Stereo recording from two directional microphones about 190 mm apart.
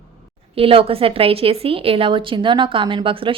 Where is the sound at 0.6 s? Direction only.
30° right (ahead or behind).